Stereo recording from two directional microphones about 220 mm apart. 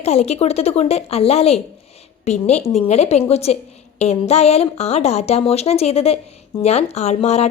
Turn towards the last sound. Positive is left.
turn(degrees=30)  # may be behind; listen again after turning